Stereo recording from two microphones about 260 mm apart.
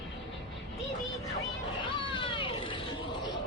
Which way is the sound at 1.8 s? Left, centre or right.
Centre.